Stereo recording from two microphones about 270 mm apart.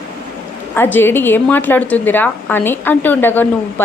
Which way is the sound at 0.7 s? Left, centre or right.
Centre.